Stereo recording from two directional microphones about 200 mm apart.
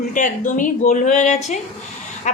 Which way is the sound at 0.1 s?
40° left (ahead or behind).